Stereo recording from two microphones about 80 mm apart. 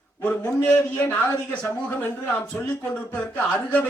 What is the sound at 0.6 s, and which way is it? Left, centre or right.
Speech, centre.